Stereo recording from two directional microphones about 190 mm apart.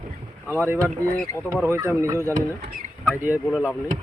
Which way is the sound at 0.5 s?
10° right (ahead or behind).